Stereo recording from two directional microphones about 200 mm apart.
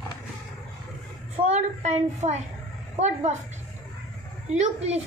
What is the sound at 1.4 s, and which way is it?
A woman's voice, 35° right (ahead or behind).